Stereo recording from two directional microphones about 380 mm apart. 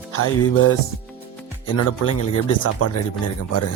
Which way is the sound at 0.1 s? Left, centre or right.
Left.